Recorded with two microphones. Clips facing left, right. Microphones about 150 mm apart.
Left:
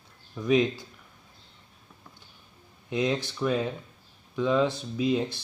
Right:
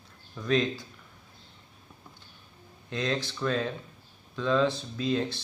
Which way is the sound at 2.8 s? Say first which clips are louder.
Left 3 dB; 15° left (ahead or behind).